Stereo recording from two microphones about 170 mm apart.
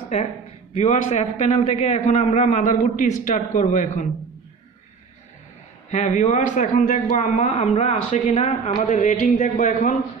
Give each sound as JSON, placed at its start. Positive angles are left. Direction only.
{"t": 0.7, "sound": "a man's voice", "side_deg": 45}
{"t": 5.9, "sound": "a man's voice", "side_deg": 45}